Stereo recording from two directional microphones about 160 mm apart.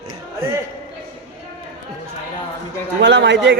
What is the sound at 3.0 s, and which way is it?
Speech, 90° right.